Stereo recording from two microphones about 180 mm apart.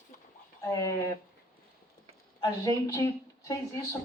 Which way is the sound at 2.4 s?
20° left (ahead or behind).